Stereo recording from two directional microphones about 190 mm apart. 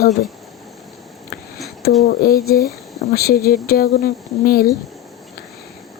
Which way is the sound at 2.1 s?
50° left (ahead or behind).